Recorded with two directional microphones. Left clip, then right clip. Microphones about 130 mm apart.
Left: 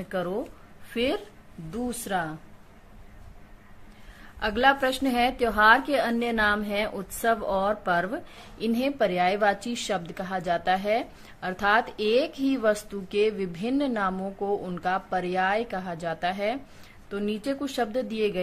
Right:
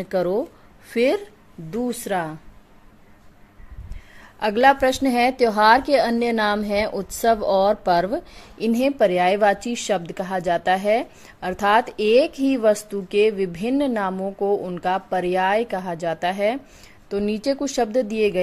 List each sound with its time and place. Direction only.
0.8 s speech: 55° right (ahead or behind)
4.4 s a woman's voice: 45° right (ahead or behind)